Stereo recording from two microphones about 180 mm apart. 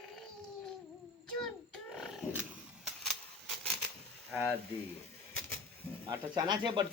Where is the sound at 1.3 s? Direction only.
5° left (ahead or behind).